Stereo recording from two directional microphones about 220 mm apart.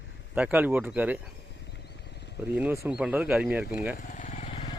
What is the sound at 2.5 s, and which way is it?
Speech, 10° right (ahead or behind).